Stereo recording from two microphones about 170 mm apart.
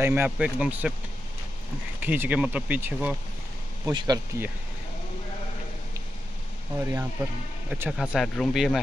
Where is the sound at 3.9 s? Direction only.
25° right (ahead or behind).